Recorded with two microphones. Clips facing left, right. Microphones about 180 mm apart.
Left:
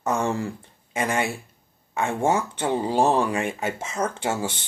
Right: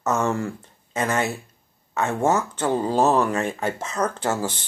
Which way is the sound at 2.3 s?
10° left (ahead or behind).